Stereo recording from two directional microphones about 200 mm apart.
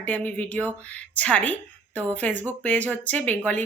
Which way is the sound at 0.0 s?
10° left (ahead or behind).